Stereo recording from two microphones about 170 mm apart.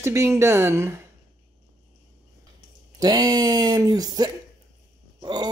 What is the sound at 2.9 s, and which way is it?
Speech, 25° right (ahead or behind).